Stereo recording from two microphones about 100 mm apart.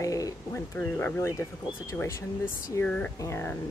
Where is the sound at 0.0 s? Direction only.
35° left (ahead or behind).